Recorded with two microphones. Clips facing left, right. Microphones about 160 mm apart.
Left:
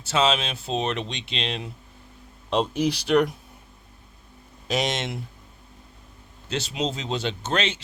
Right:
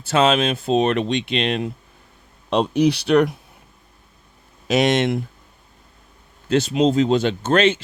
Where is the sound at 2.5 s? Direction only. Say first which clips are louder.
Right 6 dB; 65° right (ahead or behind).